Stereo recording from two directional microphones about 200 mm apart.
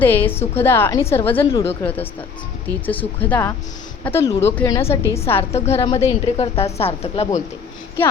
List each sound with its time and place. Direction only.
0.0 s a woman's voice: 10° left (ahead or behind)
5.5 s a woman's voice: 30° left (ahead or behind)